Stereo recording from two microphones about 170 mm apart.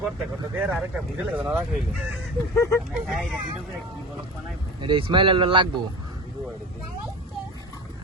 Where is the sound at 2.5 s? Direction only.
20° left (ahead or behind).